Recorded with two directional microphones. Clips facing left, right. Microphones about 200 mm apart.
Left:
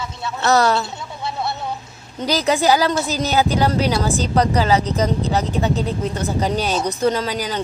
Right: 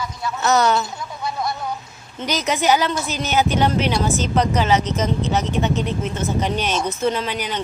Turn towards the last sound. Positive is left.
turn(degrees=35)  # may be behind; listen again after turning